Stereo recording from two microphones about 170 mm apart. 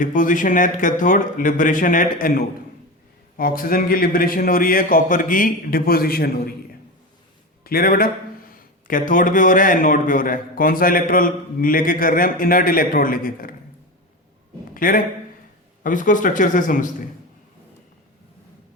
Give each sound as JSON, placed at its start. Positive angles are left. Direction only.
{"t": 0.0, "sound": "a man's voice", "side_deg": 50}
{"t": 7.6, "sound": "a man's voice", "side_deg": 60}
{"t": 14.7, "sound": "a sound", "side_deg": 55}
{"t": 15.8, "sound": "a man's voice", "side_deg": 50}